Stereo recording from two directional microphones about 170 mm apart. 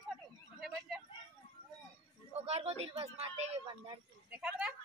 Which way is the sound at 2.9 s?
35° right (ahead or behind).